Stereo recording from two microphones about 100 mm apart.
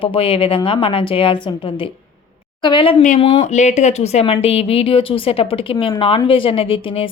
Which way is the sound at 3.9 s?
90° left.